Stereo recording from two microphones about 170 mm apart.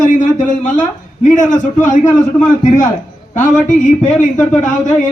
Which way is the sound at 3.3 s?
50° left (ahead or behind).